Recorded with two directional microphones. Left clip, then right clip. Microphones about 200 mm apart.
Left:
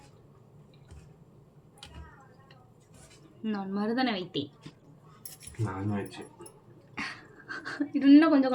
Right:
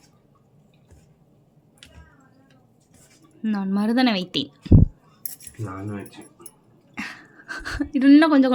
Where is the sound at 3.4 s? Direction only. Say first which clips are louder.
Right 7 dB; 35° right (ahead or behind).